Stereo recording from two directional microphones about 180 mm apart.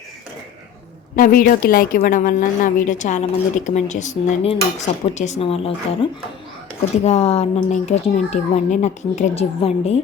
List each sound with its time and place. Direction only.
1.1 s a woman's voice: 50° left (ahead or behind)